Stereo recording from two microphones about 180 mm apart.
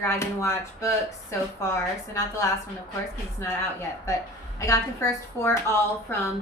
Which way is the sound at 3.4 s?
15° left (ahead or behind).